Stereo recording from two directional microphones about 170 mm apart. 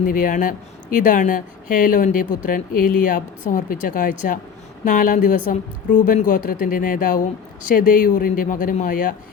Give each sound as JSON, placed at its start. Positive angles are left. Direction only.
{"t": 0.0, "sound": "speech", "side_deg": 55}